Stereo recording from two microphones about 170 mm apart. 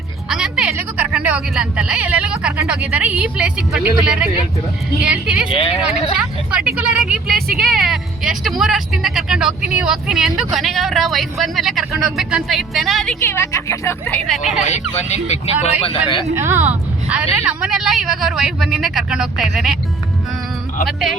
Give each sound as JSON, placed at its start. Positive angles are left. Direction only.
{"t": 0.3, "sound": "music", "side_deg": -5}
{"t": 1.1, "sound": "a woman's voice", "side_deg": -10}
{"t": 5.9, "sound": "speech", "side_deg": 35}
{"t": 6.1, "sound": "speech", "side_deg": -5}
{"t": 13.2, "sound": "speech", "side_deg": 15}
{"t": 14.6, "sound": "speech", "side_deg": 40}
{"t": 16.3, "sound": "speech", "side_deg": -15}
{"t": 20.8, "sound": "speech", "side_deg": 0}